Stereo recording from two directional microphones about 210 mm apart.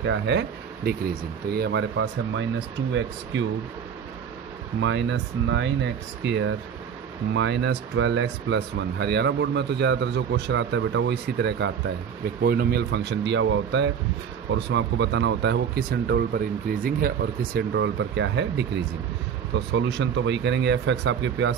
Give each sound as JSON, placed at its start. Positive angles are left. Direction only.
{"t": 0.0, "sound": "speech", "side_deg": -60}
{"t": 4.8, "sound": "speech", "side_deg": -60}